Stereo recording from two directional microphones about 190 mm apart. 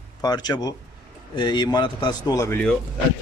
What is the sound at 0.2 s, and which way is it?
Speech, 20° left (ahead or behind).